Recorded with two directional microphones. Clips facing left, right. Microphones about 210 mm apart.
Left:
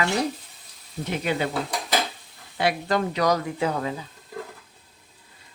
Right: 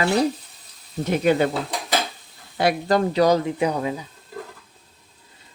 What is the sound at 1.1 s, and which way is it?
Speech, 45° right (ahead or behind).